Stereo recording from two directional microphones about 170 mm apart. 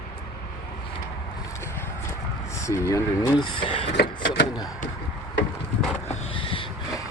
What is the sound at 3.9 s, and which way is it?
Printer, 75° left (ahead or behind).